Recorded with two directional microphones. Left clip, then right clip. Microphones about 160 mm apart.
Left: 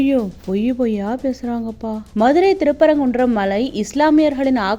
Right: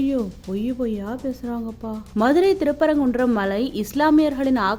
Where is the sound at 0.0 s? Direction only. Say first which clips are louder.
Left 6 dB; 20° left (ahead or behind).